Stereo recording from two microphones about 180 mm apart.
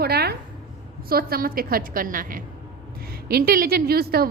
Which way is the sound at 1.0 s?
55° right (ahead or behind).